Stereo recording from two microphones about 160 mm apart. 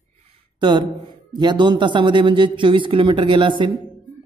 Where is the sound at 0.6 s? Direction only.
30° right (ahead or behind).